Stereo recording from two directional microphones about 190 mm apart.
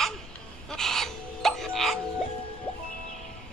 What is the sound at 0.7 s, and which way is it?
Music, centre (ahead or behind).